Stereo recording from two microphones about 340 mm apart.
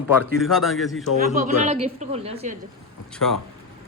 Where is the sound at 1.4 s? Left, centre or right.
Centre.